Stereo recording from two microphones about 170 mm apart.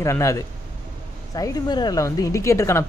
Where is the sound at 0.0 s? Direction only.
15° left (ahead or behind).